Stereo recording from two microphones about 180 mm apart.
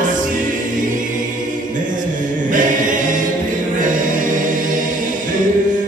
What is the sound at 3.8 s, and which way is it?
Chant, 45° right (ahead or behind).